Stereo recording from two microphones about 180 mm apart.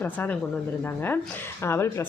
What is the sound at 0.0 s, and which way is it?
Speech, 10° left (ahead or behind).